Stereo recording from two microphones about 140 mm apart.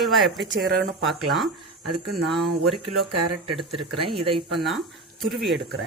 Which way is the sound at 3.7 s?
40° right (ahead or behind).